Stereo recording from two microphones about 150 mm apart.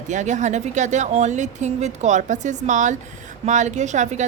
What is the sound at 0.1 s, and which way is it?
A woman's voice, 55° right (ahead or behind).